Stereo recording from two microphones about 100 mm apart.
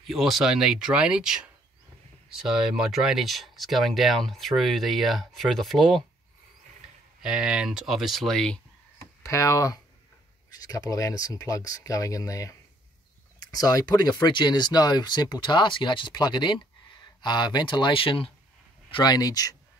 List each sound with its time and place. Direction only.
0.0 s speech: centre (ahead or behind)
7.2 s speech: 5° right (ahead or behind)
9.2 s speech: 30° left (ahead or behind); by 18.3 s 60° left (ahead or behind)
18.9 s speech: 40° left (ahead or behind)